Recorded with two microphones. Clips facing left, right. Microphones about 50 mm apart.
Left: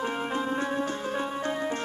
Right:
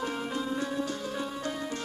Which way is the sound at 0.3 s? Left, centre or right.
Left.